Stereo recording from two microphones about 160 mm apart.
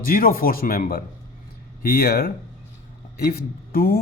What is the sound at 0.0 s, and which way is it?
Speech, 65° left (ahead or behind).